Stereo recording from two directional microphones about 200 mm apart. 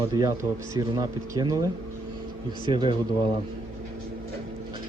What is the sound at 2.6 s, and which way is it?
Speech, 25° right (ahead or behind).